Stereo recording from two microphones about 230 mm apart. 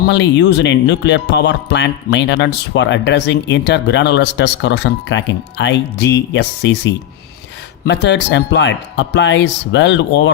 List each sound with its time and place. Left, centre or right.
0.1 s speech: left